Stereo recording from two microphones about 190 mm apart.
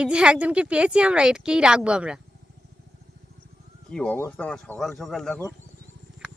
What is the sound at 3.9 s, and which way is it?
Speech, 5° left (ahead or behind).